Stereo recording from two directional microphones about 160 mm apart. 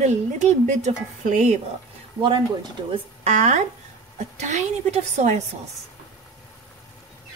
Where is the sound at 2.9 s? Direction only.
45° right (ahead or behind).